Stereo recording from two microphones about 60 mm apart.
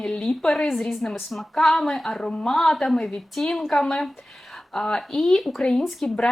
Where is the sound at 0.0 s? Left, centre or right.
Centre.